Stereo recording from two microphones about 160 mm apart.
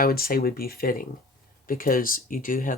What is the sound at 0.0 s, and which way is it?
Speech, 65° left (ahead or behind).